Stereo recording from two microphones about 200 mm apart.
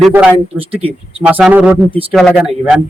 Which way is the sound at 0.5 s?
30° right (ahead or behind).